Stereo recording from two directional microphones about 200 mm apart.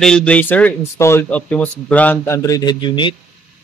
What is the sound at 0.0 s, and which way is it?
Speech, 5° left (ahead or behind).